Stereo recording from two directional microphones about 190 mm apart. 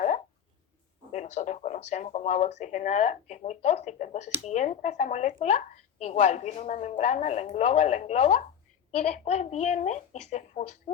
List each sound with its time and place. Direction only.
1.1 s speech: 40° left (ahead or behind)